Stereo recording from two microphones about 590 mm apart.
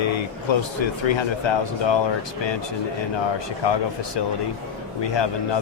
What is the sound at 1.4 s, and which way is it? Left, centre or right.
Speech, left.